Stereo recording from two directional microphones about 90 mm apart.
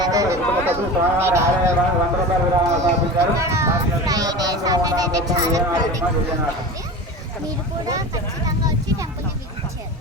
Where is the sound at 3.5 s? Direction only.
30° right (ahead or behind).